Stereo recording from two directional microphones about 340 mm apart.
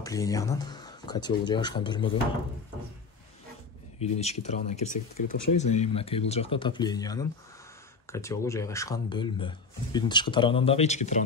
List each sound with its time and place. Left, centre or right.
0.0 s speech: centre
4.0 s speech: centre